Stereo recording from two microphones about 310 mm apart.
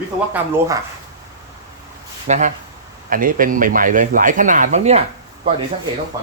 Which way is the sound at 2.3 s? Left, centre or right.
Right.